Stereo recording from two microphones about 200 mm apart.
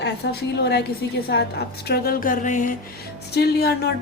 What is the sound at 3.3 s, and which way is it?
Speech, 55° left (ahead or behind).